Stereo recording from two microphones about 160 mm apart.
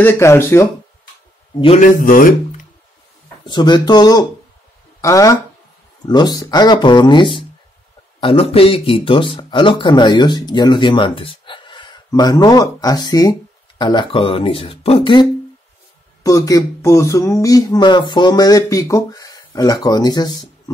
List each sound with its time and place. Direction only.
0.0 s speech: 15° left (ahead or behind)
1.8 s speech: 60° left (ahead or behind)
3.4 s speech: 30° left (ahead or behind)
16.2 s speech: 20° left (ahead or behind)